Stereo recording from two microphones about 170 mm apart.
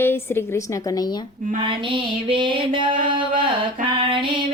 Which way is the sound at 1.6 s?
30° right (ahead or behind).